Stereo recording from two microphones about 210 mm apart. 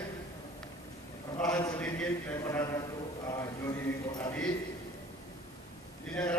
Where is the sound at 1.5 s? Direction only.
15° left (ahead or behind).